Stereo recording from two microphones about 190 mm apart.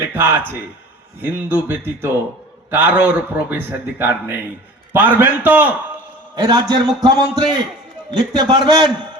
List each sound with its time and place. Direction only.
0.1 s a man's voice: 10° right (ahead or behind)
6.3 s a man's voice: 20° right (ahead or behind)